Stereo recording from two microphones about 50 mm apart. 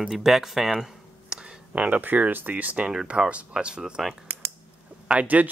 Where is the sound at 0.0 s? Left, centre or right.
Centre.